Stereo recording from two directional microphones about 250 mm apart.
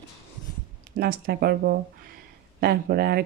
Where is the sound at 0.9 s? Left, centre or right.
Right.